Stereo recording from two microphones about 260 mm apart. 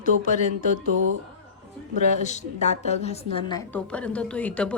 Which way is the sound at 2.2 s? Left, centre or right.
Left.